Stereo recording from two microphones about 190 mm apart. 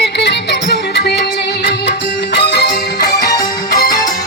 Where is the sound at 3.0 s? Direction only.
20° left (ahead or behind).